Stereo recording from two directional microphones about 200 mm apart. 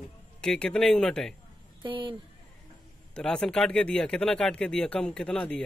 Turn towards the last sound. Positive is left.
turn(degrees=5)  # may be behind; listen again after turning